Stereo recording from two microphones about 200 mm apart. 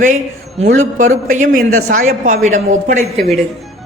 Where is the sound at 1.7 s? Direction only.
90° right.